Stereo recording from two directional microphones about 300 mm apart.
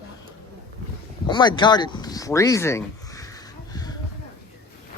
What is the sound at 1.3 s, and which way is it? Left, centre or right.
Speech, centre.